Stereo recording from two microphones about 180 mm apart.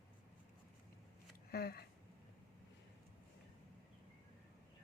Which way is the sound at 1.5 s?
60° left (ahead or behind).